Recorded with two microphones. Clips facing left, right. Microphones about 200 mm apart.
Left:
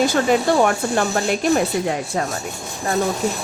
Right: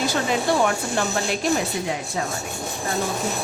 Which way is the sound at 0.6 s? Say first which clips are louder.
Left 4 dB; 50° left (ahead or behind).